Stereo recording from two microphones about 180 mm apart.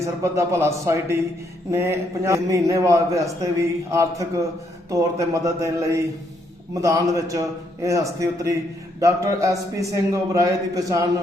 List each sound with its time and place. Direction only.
0.0 s a man's voice: 15° right (ahead or behind)